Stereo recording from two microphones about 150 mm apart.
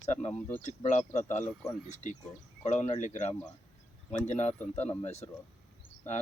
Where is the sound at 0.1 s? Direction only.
50° left (ahead or behind).